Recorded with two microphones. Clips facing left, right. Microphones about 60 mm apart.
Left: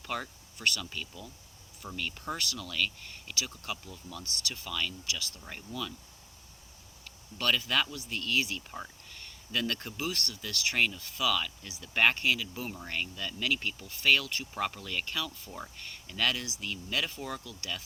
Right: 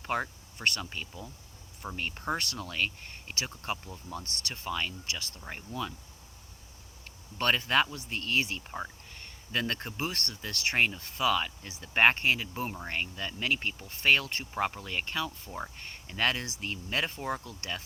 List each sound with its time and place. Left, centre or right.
0.0 s speech: right
5.4 s speech: right
7.0 s speech: right
14.5 s speech: right